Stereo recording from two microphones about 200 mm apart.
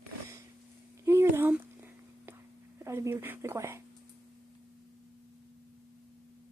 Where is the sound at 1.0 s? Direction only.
15° right (ahead or behind).